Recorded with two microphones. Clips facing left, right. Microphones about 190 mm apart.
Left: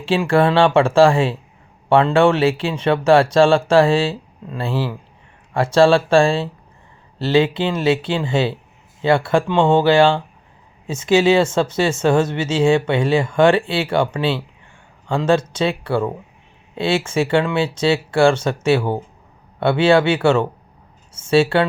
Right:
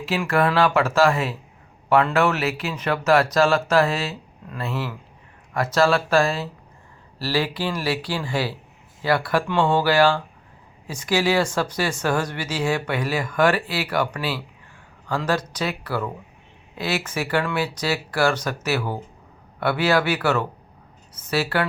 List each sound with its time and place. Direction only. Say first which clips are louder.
0.0 s speech: left 5 dB; 30° left (ahead or behind)